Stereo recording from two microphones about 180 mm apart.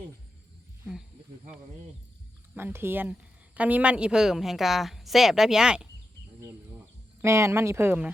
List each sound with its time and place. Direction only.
2.6 s a woman's voice: 10° right (ahead or behind)
7.2 s speech: 15° right (ahead or behind)